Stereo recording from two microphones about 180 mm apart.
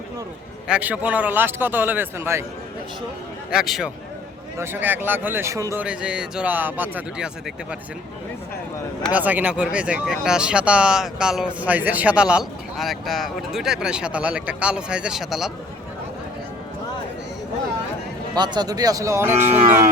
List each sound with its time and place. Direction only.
0.7 s a man's voice: 10° right (ahead or behind)
3.5 s speech: centre (ahead or behind)
4.5 s a man's voice: 15° right (ahead or behind)
5.8 s a man's voice: 5° right (ahead or behind)
9.1 s speech: 10° right (ahead or behind)
18.3 s speech: 25° right (ahead or behind)
19.4 s moo: 40° right (ahead or behind)